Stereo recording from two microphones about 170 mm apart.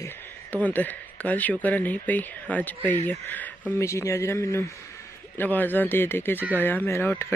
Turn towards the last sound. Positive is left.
turn(degrees=15)  # may be behind; listen again after turning